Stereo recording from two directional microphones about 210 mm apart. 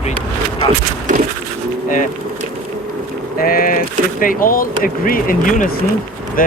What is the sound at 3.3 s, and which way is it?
Speech, 45° left (ahead or behind).